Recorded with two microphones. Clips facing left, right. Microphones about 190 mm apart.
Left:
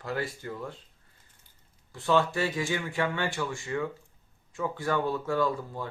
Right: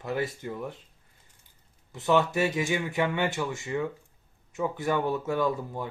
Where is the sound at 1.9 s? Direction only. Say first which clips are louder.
Right 2 dB; 20° right (ahead or behind).